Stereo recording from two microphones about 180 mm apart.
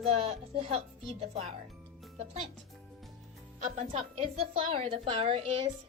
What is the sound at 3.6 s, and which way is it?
A woman's voice, 40° right (ahead or behind).